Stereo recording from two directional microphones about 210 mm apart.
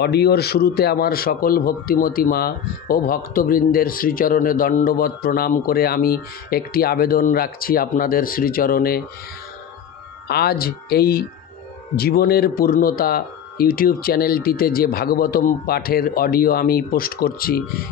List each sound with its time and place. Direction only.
0.0 s a man's voice: 50° left (ahead or behind)
10.2 s a man's voice: 50° left (ahead or behind)